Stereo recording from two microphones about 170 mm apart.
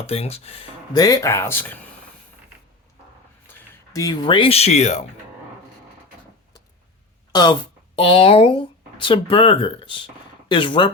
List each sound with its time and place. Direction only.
0.0 s speech: 35° left (ahead or behind)
0.9 s speech: 20° left (ahead or behind)
3.9 s speech: 20° left (ahead or behind); by 5.0 s 40° left (ahead or behind)
7.3 s speech: 25° left (ahead or behind)